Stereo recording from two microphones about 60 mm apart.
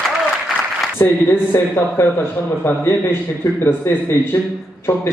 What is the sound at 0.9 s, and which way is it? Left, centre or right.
A woman's voice, left.